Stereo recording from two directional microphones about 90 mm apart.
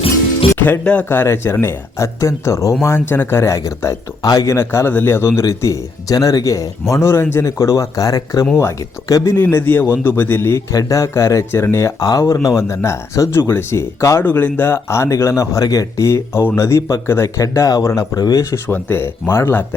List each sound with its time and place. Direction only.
0.6 s speech: 15° left (ahead or behind); by 4.4 s 40° left (ahead or behind)
4.4 s speech: 30° left (ahead or behind)
5.5 s speech: 40° left (ahead or behind)
9.4 s speech: 25° left (ahead or behind)
14.3 s speech: 20° left (ahead or behind); by 18.4 s 45° left (ahead or behind)
18.5 s speech: 25° left (ahead or behind)